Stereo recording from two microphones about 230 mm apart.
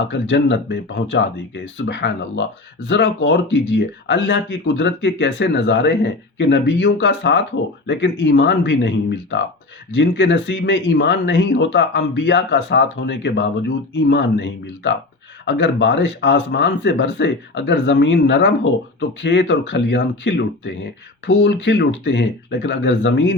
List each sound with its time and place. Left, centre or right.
0.1 s speech: left
15.4 s speech: left